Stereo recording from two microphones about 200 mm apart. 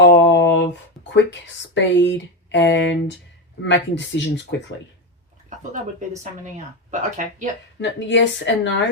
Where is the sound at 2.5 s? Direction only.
60° left (ahead or behind).